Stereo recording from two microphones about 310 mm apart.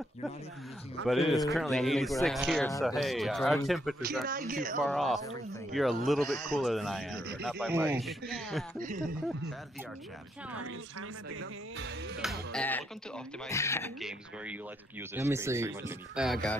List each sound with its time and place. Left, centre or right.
1.0 s speech: centre
4.3 s speech: right
4.7 s speech: centre
8.7 s speech: right
10.6 s speech: right
12.2 s speech: centre